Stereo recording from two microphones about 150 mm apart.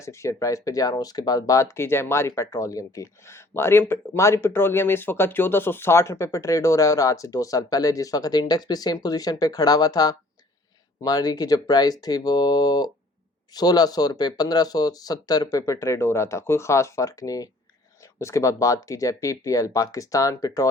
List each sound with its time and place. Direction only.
0.0 s speech: 20° left (ahead or behind)